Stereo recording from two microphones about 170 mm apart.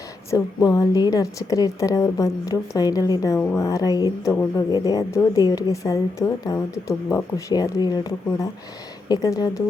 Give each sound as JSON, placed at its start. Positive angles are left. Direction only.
{"t": 0.3, "sound": "a woman's voice", "side_deg": 20}
{"t": 9.0, "sound": "a woman's voice", "side_deg": 20}